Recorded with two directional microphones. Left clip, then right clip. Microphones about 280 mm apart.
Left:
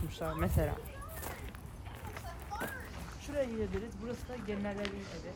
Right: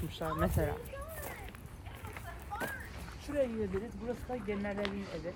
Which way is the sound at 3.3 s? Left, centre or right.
Centre.